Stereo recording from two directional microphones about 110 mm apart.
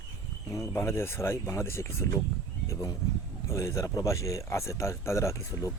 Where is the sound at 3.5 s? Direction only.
25° left (ahead or behind).